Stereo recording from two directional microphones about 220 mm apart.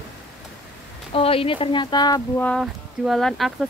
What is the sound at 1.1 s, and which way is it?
Speech, 25° left (ahead or behind).